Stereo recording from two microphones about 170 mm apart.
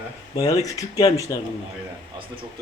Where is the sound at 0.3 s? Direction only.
20° left (ahead or behind).